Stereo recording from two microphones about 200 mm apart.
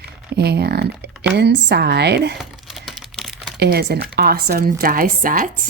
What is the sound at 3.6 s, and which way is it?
A woman's voice, 55° right (ahead or behind).